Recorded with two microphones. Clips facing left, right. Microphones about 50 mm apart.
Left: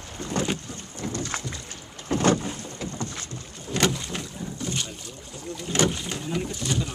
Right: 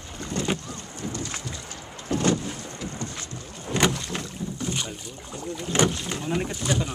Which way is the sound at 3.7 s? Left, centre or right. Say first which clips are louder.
Right 1 dB; right.